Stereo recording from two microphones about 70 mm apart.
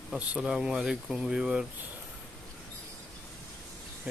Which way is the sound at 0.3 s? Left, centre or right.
Centre.